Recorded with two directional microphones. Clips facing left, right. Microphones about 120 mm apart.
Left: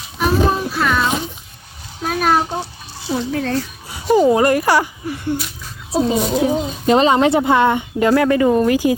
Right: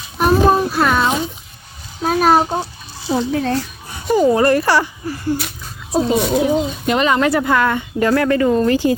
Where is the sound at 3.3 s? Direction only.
15° right (ahead or behind).